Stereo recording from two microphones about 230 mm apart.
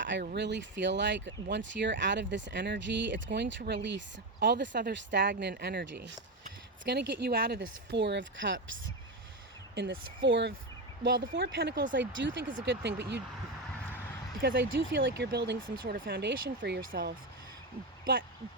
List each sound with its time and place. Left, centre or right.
0.0 s speech: right
10.2 s speech: right
14.4 s speech: right